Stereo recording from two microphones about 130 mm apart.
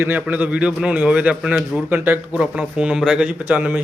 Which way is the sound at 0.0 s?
15° right (ahead or behind).